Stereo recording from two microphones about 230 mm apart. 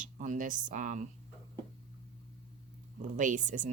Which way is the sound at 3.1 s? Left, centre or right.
Right.